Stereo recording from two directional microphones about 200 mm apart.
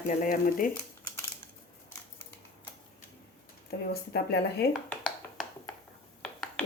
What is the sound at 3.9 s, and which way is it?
Speech, 55° left (ahead or behind).